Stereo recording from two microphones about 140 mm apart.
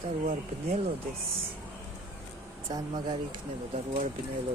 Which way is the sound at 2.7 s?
30° right (ahead or behind).